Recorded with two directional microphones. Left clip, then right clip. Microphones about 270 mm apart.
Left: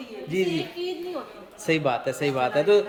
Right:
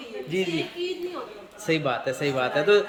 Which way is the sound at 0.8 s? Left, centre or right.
Left.